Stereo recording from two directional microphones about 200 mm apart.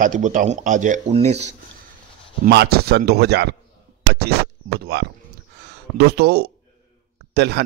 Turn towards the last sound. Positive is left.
turn(degrees=-55)  # may be behind; listen again after turning